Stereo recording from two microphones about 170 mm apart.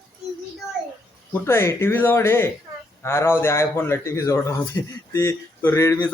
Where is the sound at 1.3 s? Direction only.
15° left (ahead or behind).